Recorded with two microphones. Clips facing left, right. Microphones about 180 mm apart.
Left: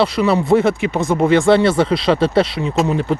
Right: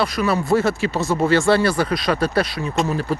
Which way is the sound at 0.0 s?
25° left (ahead or behind).